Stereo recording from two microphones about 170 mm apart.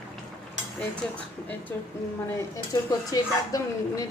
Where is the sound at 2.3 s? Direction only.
20° left (ahead or behind).